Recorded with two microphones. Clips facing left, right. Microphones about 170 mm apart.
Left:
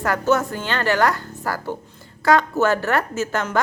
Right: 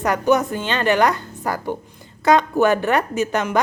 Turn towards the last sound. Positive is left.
turn(degrees=-20)  # may be behind; listen again after turning